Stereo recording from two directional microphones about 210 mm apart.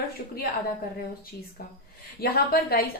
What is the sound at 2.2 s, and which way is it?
Speech, 45° left (ahead or behind).